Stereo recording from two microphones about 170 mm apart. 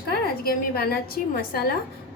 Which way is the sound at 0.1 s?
65° left (ahead or behind).